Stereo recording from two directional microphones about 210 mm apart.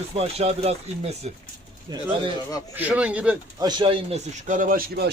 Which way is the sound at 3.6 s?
25° right (ahead or behind).